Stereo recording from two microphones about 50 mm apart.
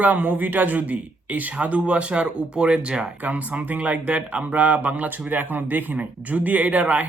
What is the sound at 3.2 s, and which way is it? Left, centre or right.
Speech, right.